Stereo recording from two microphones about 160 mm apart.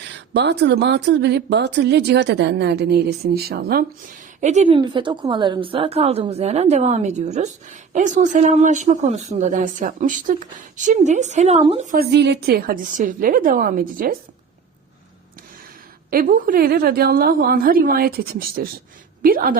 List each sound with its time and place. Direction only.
0.0 s speech: 90° right; by 3.8 s 75° right (ahead or behind)
4.4 s a woman's voice: 50° right (ahead or behind)
4.8 s a woman's voice: 30° right (ahead or behind)
11.9 s a woman's voice: 80° right; by 14.2 s 60° right (ahead or behind)
16.0 s a woman's voice: 65° right (ahead or behind)